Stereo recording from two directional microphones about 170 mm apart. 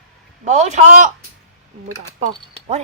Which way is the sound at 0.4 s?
40° right (ahead or behind).